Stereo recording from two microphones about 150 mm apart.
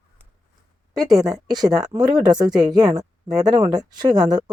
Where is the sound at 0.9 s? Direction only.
25° right (ahead or behind).